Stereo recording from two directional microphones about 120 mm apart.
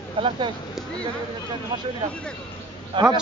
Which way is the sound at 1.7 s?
40° right (ahead or behind).